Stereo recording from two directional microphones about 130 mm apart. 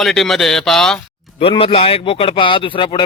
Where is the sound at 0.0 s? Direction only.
Centre (ahead or behind).